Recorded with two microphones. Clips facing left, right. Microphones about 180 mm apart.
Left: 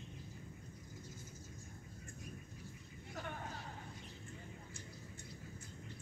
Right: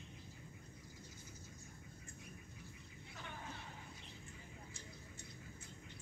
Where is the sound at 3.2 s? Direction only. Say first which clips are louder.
Left 5 dB; 45° left (ahead or behind).